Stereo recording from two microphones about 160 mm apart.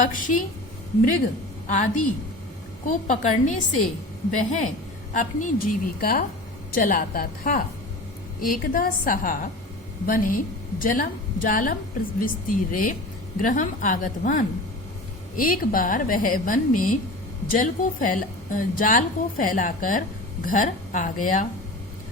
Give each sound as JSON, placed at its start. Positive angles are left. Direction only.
{"t": 0.0, "sound": "a woman's voice", "side_deg": 55}
{"t": 1.6, "sound": "a woman's voice", "side_deg": 55}
{"t": 10.8, "sound": "a woman's voice", "side_deg": 60}